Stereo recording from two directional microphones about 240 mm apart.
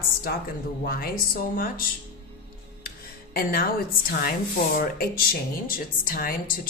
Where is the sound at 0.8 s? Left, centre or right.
Left.